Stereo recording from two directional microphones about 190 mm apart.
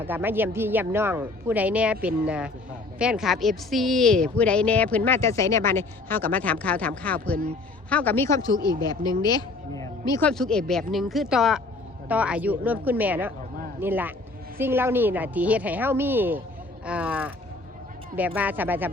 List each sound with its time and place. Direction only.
0.0 s speech: 10° right (ahead or behind)